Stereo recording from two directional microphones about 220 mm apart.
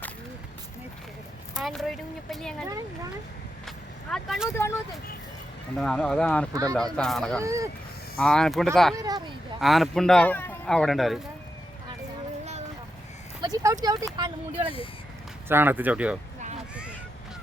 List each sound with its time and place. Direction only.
1.5 s speech: centre (ahead or behind)
2.6 s speech: 15° right (ahead or behind)
3.7 s vehicle: centre (ahead or behind)
4.5 s speech: 10° left (ahead or behind)
6.5 s speech: 15° right (ahead or behind)
6.9 s speech: 5° left (ahead or behind)
7.4 s speech: 15° right (ahead or behind)
8.2 s speech: 5° left (ahead or behind)
9.0 s speech: 15° right (ahead or behind)
9.6 s speech: centre (ahead or behind)
13.4 s speech: 15° right (ahead or behind)
15.4 s speech: 10° right (ahead or behind)